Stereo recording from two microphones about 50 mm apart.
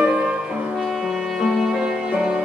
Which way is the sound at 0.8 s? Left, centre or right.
Centre.